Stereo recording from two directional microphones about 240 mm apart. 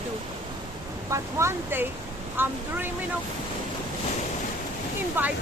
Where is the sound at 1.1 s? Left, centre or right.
Centre.